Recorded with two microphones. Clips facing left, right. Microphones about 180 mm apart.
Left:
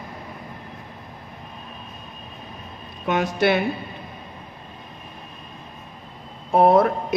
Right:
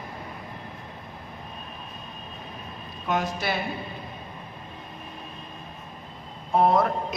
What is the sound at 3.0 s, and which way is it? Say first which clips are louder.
Speech: left 7 dB; 70° left (ahead or behind).